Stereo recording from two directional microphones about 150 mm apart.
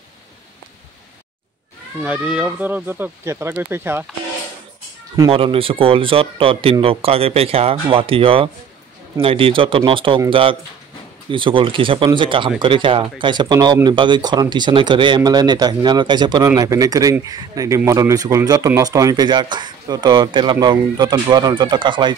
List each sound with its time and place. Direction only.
2.0 s speech: 10° right (ahead or behind)
5.3 s speech: 40° right (ahead or behind)